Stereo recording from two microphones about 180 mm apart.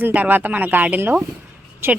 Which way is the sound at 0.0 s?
10° right (ahead or behind).